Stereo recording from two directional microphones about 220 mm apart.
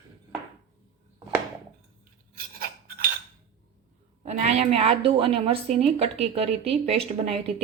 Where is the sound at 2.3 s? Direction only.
40° right (ahead or behind).